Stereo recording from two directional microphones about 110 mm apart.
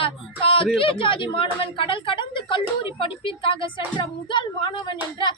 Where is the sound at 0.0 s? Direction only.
55° left (ahead or behind).